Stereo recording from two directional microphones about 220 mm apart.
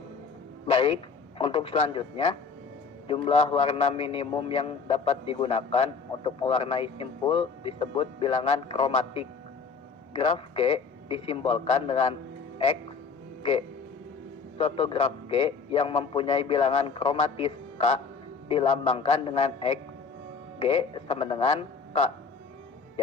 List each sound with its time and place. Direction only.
0.7 s a sound: 25° left (ahead or behind)
1.4 s a man's voice: 25° left (ahead or behind)
13.4 s a man's voice: 25° left (ahead or behind)